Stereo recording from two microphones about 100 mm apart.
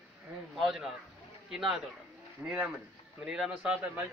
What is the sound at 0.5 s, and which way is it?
Speech, 5° right (ahead or behind).